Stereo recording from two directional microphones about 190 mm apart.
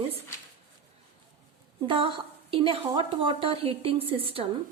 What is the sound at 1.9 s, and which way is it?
A woman's voice, 25° right (ahead or behind).